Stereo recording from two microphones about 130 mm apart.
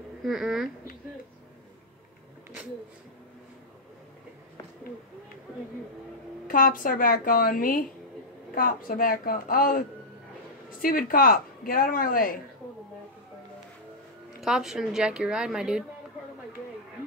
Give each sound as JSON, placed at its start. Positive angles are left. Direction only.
{"t": 0.2, "sound": "a woman's voice", "side_deg": 0}
{"t": 6.4, "sound": "speech", "side_deg": 90}
{"t": 14.4, "sound": "a woman's voice", "side_deg": -5}